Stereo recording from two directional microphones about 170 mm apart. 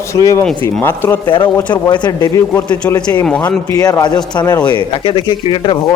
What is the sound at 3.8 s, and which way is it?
Speech, 20° left (ahead or behind).